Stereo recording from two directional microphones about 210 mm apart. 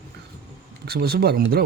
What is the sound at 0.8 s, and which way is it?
Speech, 50° right (ahead or behind).